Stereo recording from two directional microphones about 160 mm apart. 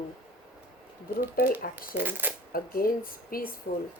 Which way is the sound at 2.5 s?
65° left (ahead or behind).